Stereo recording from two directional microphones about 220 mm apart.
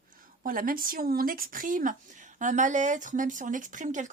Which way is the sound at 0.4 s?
40° right (ahead or behind).